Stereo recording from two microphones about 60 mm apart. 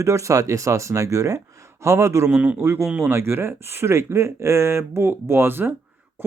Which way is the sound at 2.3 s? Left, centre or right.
Right.